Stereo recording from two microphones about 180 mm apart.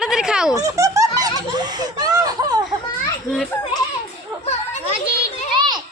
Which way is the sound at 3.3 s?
Centre (ahead or behind).